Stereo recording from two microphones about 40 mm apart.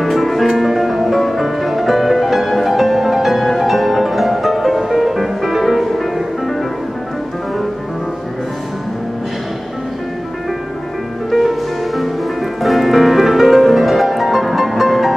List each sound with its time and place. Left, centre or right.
0.0 s music: centre
11.2 s music: centre